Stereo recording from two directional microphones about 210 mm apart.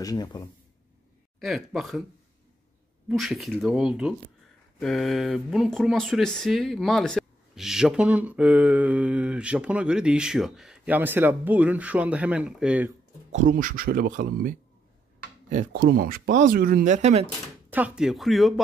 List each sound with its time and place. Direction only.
0.0 s speech: 20° left (ahead or behind)
1.4 s speech: centre (ahead or behind)
3.1 s speech: centre (ahead or behind)
13.3 s speech: 35° right (ahead or behind)
15.5 s speech: 45° right (ahead or behind)
17.6 s speech: 5° right (ahead or behind)